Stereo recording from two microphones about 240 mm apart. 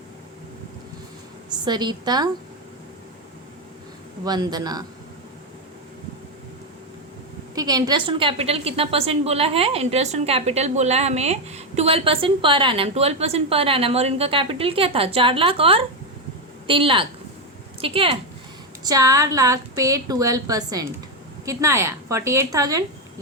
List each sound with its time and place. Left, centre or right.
1.5 s a woman's voice: centre
4.2 s a woman's voice: centre
7.5 s a woman's voice: centre